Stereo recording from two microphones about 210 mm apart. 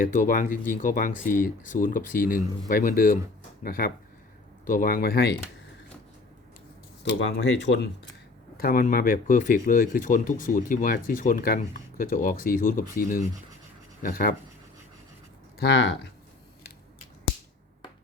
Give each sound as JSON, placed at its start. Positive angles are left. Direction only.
{"t": 0.0, "sound": "speech", "side_deg": 40}
{"t": 7.0, "sound": "speech", "side_deg": 60}
{"t": 8.5, "sound": "speech", "side_deg": 45}
{"t": 15.5, "sound": "speech", "side_deg": 55}